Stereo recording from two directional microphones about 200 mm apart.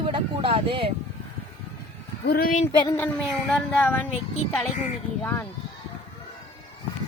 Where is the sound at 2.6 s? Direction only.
10° left (ahead or behind).